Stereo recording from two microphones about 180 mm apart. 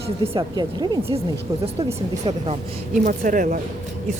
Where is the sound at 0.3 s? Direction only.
25° right (ahead or behind).